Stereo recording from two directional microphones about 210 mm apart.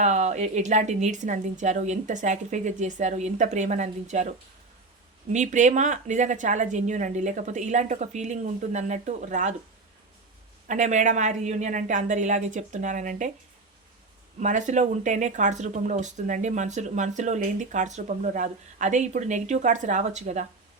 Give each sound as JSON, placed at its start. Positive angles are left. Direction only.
{"t": 0.0, "sound": "speech", "side_deg": -35}
{"t": 5.3, "sound": "speech", "side_deg": -35}
{"t": 10.7, "sound": "speech", "side_deg": -35}
{"t": 14.3, "sound": "speech", "side_deg": -35}